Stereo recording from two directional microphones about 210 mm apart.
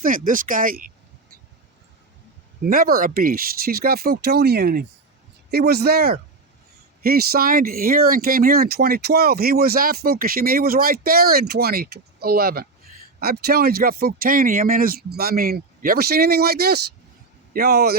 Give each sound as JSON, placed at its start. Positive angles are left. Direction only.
{"t": 0.0, "sound": "speech", "side_deg": -40}
{"t": 2.6, "sound": "speech", "side_deg": -45}